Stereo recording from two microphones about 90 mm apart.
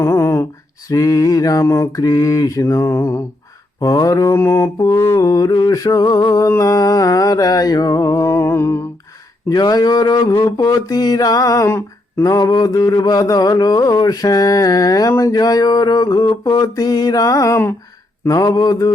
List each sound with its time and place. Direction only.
0.0 s a sound: 30° left (ahead or behind)
0.9 s mantra: 40° left (ahead or behind)
3.8 s mantra: 45° left (ahead or behind)
9.5 s mantra: 45° left (ahead or behind)